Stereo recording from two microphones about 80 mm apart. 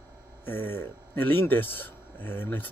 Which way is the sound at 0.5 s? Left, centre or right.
Left.